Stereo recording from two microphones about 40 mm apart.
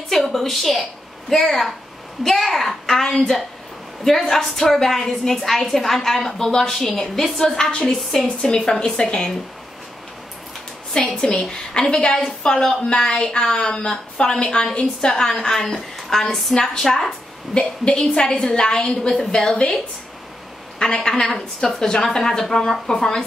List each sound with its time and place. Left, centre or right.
0.1 s a woman's voice: centre; by 9.3 s left
10.9 s a woman's voice: centre
17.6 s a woman's voice: left
21.1 s a woman's voice: centre